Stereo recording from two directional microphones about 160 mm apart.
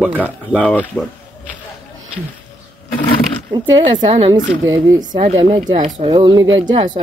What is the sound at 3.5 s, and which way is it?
Speech, 30° right (ahead or behind).